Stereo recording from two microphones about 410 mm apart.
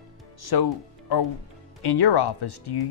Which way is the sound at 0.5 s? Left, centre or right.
Left.